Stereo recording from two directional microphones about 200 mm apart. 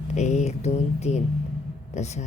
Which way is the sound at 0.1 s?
35° left (ahead or behind).